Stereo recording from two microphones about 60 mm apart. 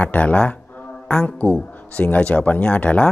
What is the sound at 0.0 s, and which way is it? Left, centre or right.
Speech, left.